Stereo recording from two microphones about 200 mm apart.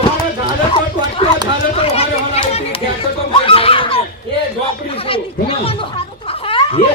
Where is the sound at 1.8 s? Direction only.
30° left (ahead or behind).